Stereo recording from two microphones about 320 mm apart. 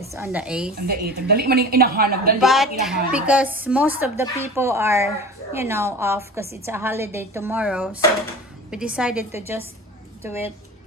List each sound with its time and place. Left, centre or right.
0.0 s a woman's voice: centre
0.8 s a woman's voice: right
2.4 s a woman's voice: centre